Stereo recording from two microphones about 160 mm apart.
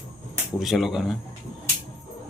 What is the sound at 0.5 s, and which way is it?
Speech, centre (ahead or behind).